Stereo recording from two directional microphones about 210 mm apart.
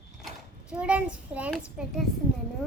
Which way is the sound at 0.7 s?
5° right (ahead or behind).